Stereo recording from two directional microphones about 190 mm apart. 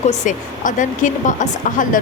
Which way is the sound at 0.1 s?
40° left (ahead or behind).